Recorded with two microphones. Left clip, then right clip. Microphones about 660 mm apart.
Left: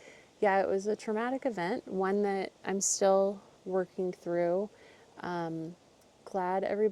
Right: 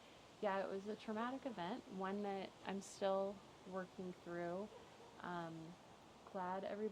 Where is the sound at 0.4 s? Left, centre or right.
Left.